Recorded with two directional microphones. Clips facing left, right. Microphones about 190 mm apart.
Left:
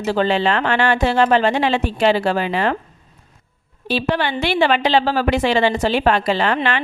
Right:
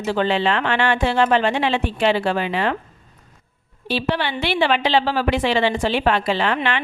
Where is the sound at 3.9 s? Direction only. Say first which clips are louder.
Left 2 dB; 45° left (ahead or behind).